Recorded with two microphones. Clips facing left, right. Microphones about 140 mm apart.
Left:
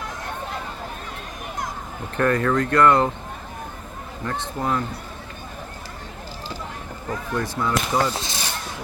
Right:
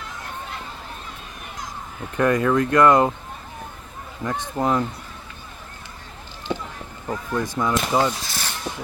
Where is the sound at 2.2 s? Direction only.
15° right (ahead or behind).